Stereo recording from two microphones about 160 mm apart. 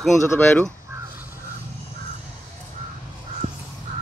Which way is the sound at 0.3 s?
15° left (ahead or behind).